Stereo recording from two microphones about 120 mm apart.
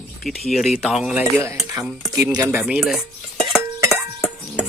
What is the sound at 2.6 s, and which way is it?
Speech, 10° right (ahead or behind).